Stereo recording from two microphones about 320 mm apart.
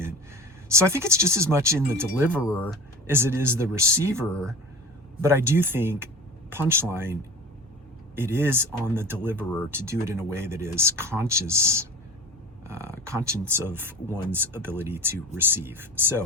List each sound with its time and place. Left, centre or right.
0.7 s speech: centre
2.3 s speech: centre
3.1 s speech: centre